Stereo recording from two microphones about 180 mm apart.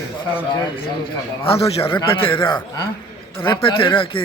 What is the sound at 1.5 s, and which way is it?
A man's voice, 30° left (ahead or behind).